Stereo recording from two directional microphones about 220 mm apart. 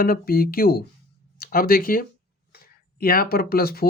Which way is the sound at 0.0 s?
40° left (ahead or behind).